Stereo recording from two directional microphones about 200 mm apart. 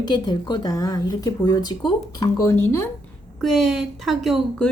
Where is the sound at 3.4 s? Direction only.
Centre (ahead or behind).